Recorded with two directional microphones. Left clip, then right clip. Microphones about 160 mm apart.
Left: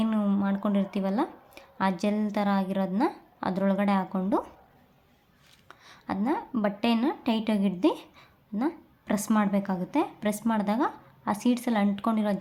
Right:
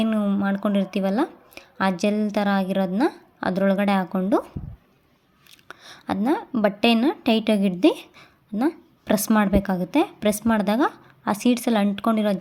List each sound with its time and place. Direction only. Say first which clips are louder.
0.0 s speech: right 5 dB; 25° right (ahead or behind)